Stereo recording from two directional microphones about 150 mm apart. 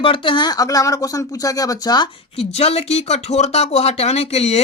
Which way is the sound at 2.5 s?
45° left (ahead or behind).